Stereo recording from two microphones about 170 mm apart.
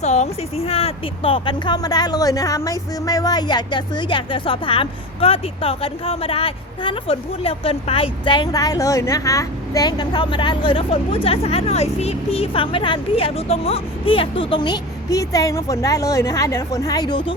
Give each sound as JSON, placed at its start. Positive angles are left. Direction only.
{"t": 0.0, "sound": "speech", "side_deg": 40}